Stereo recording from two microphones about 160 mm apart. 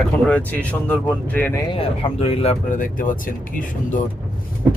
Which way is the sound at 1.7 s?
35° left (ahead or behind).